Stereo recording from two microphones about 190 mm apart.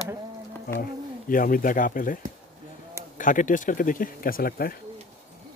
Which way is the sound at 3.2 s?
45° left (ahead or behind).